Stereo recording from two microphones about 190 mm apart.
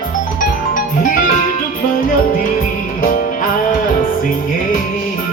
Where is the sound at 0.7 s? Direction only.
45° left (ahead or behind).